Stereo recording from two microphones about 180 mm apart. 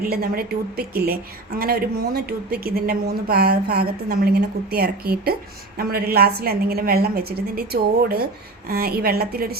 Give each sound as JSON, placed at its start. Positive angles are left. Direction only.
{"t": 0.0, "sound": "a woman's voice", "side_deg": -55}